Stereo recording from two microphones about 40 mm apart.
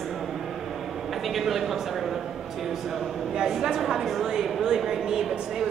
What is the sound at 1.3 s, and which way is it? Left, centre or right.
Speech, centre.